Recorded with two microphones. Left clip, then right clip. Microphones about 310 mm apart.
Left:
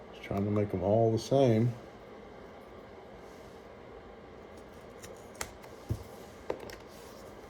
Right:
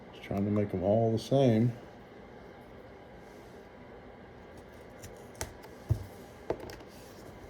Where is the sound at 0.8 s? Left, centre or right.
Left.